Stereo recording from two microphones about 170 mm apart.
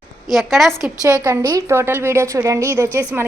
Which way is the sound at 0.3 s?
Centre (ahead or behind).